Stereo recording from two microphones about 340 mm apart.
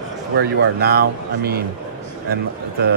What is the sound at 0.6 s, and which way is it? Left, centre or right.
Speech, right.